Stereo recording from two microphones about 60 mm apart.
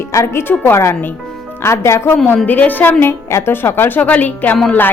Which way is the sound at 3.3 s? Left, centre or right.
Left.